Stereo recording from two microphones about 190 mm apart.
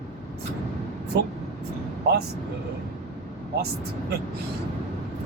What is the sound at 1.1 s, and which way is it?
Speech, 60° right (ahead or behind).